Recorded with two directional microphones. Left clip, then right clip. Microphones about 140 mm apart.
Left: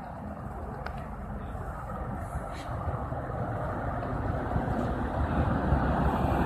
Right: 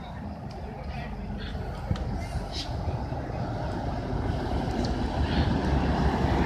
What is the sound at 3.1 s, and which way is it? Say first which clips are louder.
Vehicle: even; 5° right (ahead or behind).